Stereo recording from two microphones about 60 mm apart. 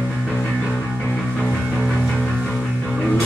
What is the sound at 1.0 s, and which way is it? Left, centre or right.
Music, left.